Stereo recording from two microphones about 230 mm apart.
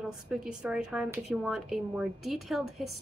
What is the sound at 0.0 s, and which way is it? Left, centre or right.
A woman's voice, centre.